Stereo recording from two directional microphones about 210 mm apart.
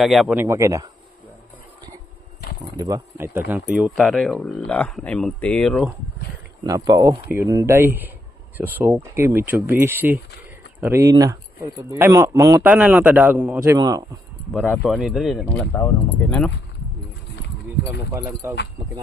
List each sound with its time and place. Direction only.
0.0 s speech: centre (ahead or behind)
2.8 s speech: 15° right (ahead or behind); by 5.9 s centre (ahead or behind)
6.6 s speech: 15° right (ahead or behind)
14.5 s speech: centre (ahead or behind)
18.1 s speech: 15° right (ahead or behind)